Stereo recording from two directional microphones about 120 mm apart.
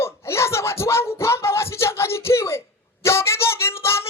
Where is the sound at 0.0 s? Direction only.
20° left (ahead or behind).